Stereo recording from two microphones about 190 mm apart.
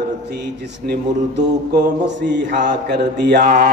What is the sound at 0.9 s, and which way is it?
Speech, 60° right (ahead or behind).